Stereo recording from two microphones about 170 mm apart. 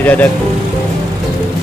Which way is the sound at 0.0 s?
10° left (ahead or behind).